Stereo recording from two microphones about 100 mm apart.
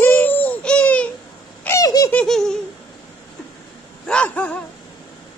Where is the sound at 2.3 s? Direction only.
5° left (ahead or behind).